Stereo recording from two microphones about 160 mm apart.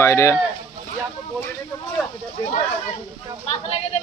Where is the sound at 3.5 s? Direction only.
40° left (ahead or behind).